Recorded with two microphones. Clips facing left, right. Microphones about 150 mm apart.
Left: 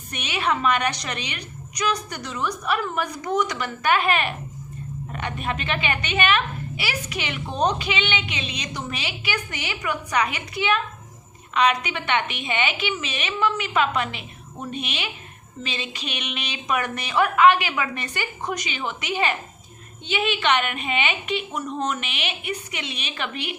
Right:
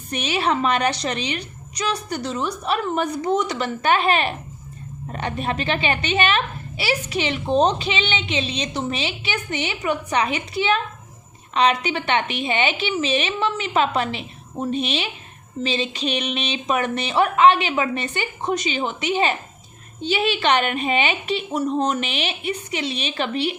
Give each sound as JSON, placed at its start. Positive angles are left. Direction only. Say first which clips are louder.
{"t": 0.1, "sound": "a woman's voice", "louder": "right 4 dB", "side_deg": -30}